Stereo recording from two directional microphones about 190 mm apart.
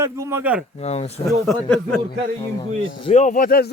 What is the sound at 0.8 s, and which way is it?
Speech, 35° left (ahead or behind).